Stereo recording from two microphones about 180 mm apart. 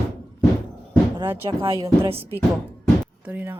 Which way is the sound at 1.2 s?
15° right (ahead or behind).